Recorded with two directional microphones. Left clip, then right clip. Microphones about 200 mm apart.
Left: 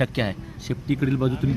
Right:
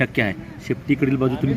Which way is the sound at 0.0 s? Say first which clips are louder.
Right 4 dB; 15° left (ahead or behind).